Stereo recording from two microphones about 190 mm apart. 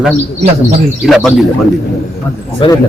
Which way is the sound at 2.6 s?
25° left (ahead or behind).